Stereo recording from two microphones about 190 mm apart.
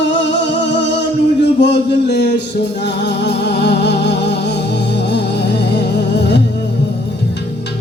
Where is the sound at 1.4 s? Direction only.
65° left (ahead or behind).